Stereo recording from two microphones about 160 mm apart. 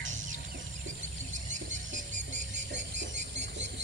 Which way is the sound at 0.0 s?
50° right (ahead or behind).